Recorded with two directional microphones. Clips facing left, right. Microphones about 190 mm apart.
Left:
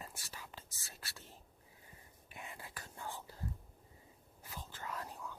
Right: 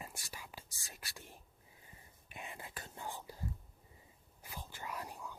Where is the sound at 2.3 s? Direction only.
20° right (ahead or behind).